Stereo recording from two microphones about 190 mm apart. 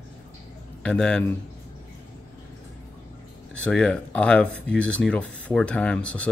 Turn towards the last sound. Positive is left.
turn(degrees=5)  # may be behind; listen again after turning